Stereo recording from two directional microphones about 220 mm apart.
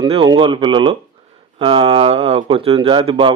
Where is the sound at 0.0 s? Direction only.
20° right (ahead or behind).